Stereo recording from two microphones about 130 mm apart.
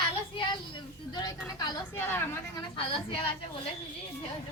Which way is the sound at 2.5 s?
40° left (ahead or behind).